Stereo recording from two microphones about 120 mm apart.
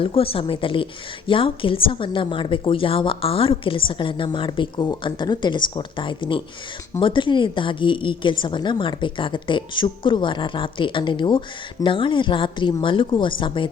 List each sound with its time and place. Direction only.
0.0 s a woman's voice: 50° left (ahead or behind)